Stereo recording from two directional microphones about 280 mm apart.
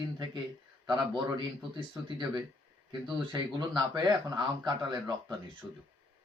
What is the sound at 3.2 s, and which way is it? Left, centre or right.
Speech, centre.